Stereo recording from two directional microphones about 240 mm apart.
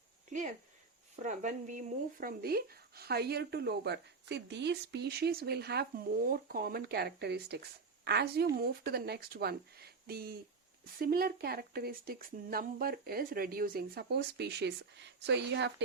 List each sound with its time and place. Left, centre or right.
1.2 s speech: right